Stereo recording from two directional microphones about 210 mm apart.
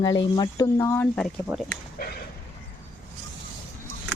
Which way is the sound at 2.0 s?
45° left (ahead or behind).